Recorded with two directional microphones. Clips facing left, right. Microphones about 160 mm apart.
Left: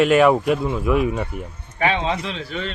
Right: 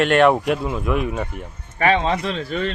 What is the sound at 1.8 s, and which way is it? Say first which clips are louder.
Speech: right 3 dB; 40° right (ahead or behind).